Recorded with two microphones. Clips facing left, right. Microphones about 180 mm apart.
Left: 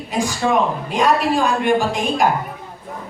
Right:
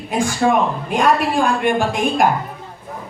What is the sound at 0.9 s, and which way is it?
Speech, 50° right (ahead or behind).